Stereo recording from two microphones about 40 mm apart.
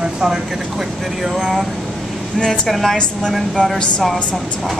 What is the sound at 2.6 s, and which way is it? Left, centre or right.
Speech, centre.